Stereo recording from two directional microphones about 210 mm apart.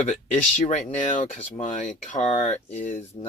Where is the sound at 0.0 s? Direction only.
35° left (ahead or behind).